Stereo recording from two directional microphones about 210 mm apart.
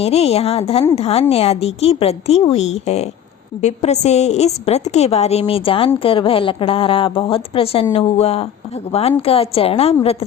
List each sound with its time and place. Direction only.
0.0 s a woman's voice: 30° left (ahead or behind)